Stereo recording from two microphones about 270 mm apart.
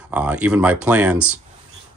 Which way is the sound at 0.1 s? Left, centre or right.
Centre.